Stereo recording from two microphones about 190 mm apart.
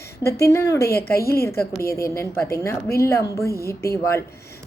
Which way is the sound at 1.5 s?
15° left (ahead or behind).